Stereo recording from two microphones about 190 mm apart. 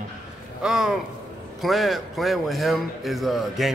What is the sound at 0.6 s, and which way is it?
A man's voice, centre (ahead or behind).